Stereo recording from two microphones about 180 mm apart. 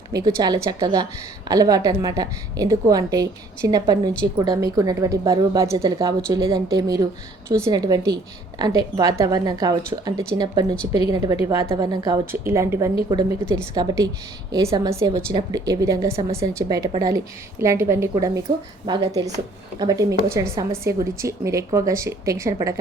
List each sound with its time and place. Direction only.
0.1 s a woman's voice: 20° right (ahead or behind)